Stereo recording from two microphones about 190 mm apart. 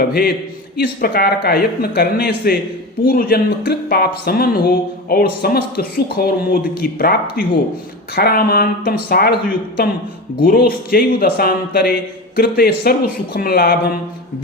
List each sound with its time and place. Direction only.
0.1 s speech: 55° left (ahead or behind)